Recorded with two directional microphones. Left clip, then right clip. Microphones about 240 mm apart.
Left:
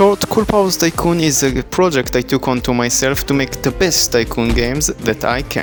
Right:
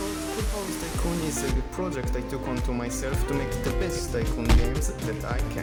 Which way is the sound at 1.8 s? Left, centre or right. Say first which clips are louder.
Left 19 dB; left.